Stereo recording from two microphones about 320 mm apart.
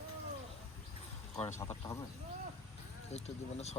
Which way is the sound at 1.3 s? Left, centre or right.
Centre.